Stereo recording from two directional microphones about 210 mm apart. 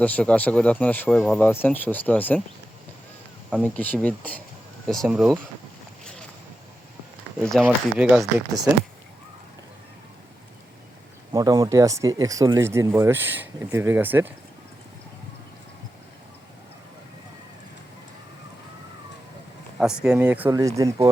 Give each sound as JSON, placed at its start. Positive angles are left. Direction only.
{"t": 0.0, "sound": "speech", "side_deg": 5}
{"t": 3.6, "sound": "speech", "side_deg": 5}
{"t": 7.5, "sound": "speech", "side_deg": -5}
{"t": 11.3, "sound": "speech", "side_deg": -20}
{"t": 19.8, "sound": "speech", "side_deg": -5}